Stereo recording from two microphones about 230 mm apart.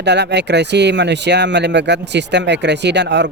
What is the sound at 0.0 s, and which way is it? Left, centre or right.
Speech, right.